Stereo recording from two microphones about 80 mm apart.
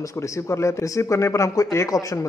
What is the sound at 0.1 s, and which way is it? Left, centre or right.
Speech, left.